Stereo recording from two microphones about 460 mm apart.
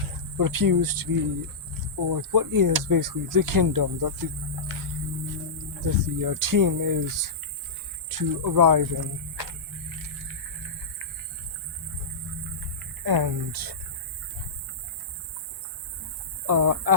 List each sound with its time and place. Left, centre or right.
0.3 s speech: right
5.8 s speech: right
13.1 s speech: right
16.5 s speech: right